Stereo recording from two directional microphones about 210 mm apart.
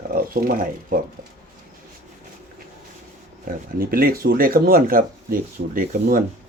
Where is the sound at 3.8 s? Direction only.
45° right (ahead or behind).